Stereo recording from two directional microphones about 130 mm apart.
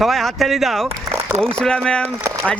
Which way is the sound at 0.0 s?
Centre (ahead or behind).